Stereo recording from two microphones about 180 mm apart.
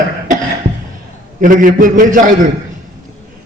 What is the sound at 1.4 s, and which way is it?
Speech, 50° right (ahead or behind).